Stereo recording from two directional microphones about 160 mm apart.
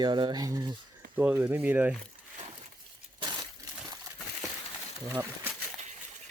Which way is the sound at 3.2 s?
25° right (ahead or behind).